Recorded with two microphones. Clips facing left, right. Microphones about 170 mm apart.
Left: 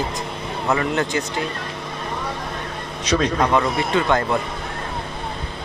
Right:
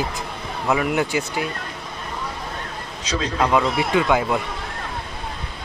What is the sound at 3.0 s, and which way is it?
Speech, 75° left (ahead or behind).